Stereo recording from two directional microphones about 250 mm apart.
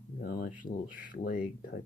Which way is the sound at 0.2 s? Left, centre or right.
Left.